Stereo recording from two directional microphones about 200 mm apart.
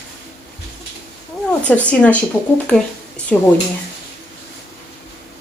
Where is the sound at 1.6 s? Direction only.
5° left (ahead or behind).